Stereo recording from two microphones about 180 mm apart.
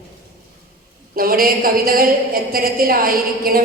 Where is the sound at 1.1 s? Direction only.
55° right (ahead or behind).